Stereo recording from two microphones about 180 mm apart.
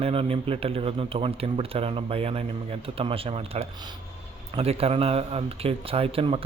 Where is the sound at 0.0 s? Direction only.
30° right (ahead or behind).